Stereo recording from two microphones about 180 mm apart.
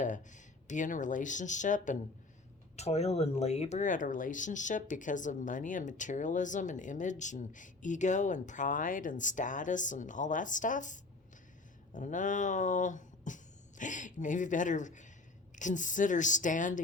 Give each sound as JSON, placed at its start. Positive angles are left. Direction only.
{"t": 0.0, "sound": "speech", "side_deg": 45}